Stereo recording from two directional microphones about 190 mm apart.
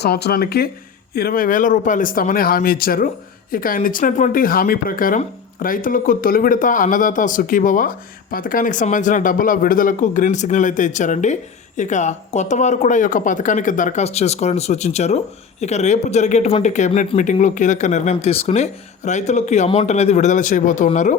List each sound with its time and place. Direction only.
0.0 s speech: 55° left (ahead or behind); by 21.2 s 40° left (ahead or behind)